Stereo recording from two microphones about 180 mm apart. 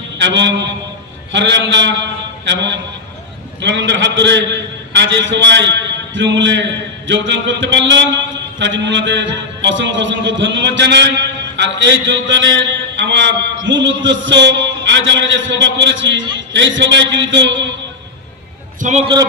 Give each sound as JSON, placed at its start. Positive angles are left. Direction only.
{"t": 0.2, "sound": "a man's voice", "side_deg": -80}
{"t": 3.6, "sound": "mantra", "side_deg": -75}
{"t": 4.9, "sound": "a man's voice", "side_deg": -85}
{"t": 7.1, "sound": "mantra", "side_deg": -85}
{"t": 18.8, "sound": "a man's voice", "side_deg": -40}
{"t": 19.0, "sound": "a sound", "side_deg": -25}